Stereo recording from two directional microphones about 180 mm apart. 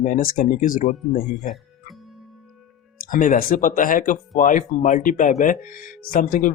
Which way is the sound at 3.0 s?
50° left (ahead or behind).